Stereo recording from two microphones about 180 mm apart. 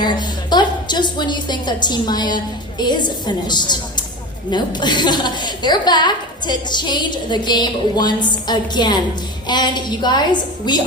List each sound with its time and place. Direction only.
0.0 s a woman's voice: 25° left (ahead or behind)